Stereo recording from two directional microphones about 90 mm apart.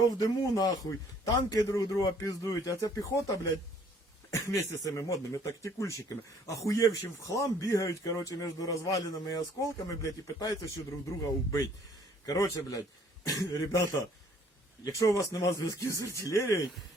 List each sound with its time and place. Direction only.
0.2 s speech: 45° left (ahead or behind)
14.8 s speech: 40° left (ahead or behind)